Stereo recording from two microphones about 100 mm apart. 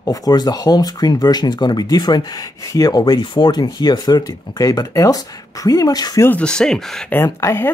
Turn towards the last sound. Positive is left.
turn(degrees=25)  # may be behind; listen again after turning